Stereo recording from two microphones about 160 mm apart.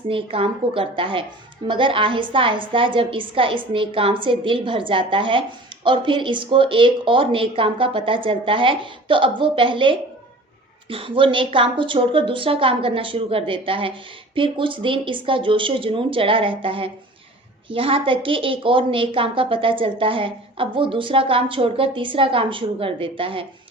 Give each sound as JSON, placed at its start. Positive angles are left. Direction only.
{"t": 0.1, "sound": "a woman's voice", "side_deg": -35}